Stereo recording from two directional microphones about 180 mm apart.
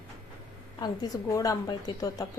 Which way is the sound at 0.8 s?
20° left (ahead or behind).